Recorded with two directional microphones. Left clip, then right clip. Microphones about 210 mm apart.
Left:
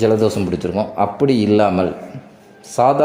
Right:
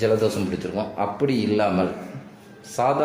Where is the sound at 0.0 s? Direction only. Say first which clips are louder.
Left 5 dB; 35° left (ahead or behind).